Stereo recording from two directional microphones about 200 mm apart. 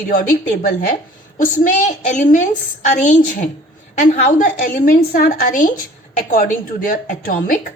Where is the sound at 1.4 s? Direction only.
40° left (ahead or behind).